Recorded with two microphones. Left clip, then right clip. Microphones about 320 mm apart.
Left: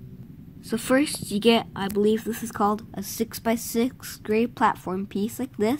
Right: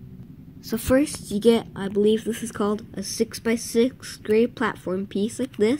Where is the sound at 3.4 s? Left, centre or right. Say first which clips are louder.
Right 3 dB; left.